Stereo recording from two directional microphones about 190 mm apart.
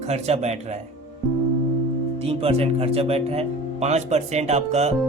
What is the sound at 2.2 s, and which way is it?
Speech, 30° right (ahead or behind).